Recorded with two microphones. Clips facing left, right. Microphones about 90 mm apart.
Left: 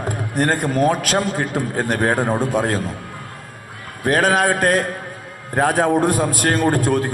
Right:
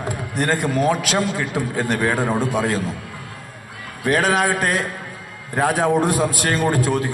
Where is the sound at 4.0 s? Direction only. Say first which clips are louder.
Left 2 dB; 45° left (ahead or behind).